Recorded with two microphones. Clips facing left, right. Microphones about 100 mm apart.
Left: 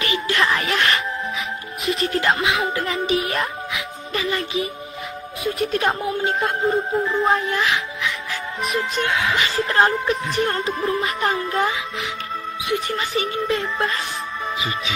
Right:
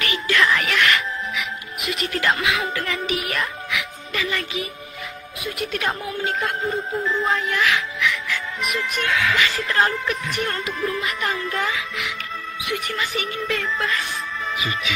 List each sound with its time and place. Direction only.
0.0 s music: 30° left (ahead or behind)
5.4 s speech: 35° left (ahead or behind)
7.1 s music: 25° left (ahead or behind)